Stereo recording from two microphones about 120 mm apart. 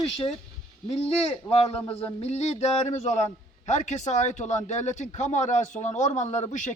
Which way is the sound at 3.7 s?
85° left.